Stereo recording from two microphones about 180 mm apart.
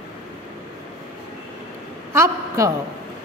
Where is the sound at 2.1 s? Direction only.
15° right (ahead or behind).